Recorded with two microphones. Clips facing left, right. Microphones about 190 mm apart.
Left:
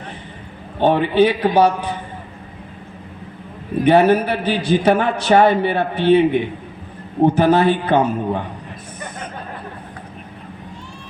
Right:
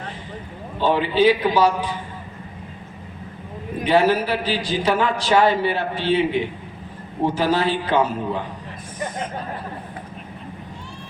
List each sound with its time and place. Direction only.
0.8 s a man's voice: 60° left (ahead or behind)
3.8 s a man's voice: 60° left (ahead or behind)